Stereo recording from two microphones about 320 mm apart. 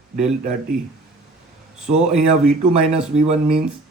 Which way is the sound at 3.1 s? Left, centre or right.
Centre.